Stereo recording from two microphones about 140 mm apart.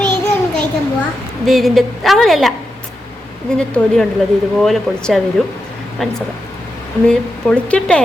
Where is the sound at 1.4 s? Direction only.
Centre (ahead or behind).